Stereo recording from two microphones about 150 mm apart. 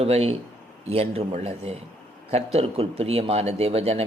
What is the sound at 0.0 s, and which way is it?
Speech, 45° right (ahead or behind).